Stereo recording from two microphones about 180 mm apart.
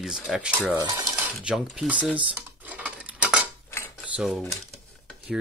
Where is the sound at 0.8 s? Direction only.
25° right (ahead or behind).